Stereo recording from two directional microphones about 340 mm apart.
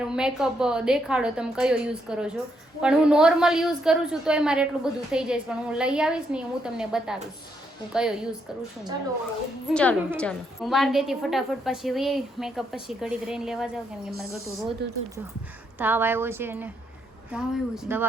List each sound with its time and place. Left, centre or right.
0.1 s a woman's voice: centre
9.7 s a woman's voice: centre
14.8 s speech: right
15.8 s a woman's voice: centre